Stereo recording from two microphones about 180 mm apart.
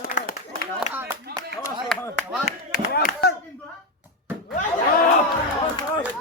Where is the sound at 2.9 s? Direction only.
45° left (ahead or behind).